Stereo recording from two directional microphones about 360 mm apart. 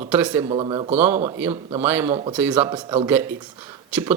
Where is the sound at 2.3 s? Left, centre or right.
Centre.